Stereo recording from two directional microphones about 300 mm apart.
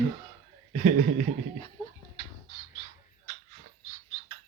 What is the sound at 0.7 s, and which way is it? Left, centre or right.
Speech, right.